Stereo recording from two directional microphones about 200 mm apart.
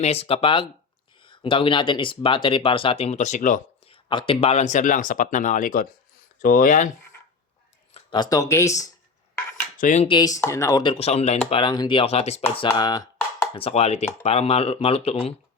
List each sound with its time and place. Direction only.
0.0 s speech: 30° left (ahead or behind)
3.8 s speech: 25° left (ahead or behind)
7.9 s speech: 20° left (ahead or behind)
9.7 s speech: 40° left (ahead or behind)
10.1 s speech: 20° left (ahead or behind)
10.9 s speech: 30° left (ahead or behind)
12.6 s speech: 20° left (ahead or behind)